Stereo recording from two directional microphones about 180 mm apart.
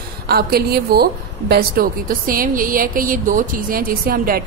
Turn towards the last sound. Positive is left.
turn(degrees=-55)  # may be behind; listen again after turning